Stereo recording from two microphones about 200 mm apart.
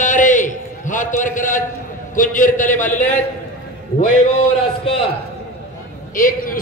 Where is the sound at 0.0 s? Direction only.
40° left (ahead or behind).